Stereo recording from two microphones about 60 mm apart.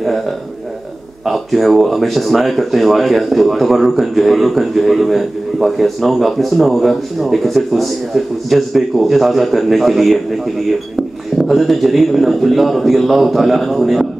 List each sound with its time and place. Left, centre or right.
1.2 s speech: centre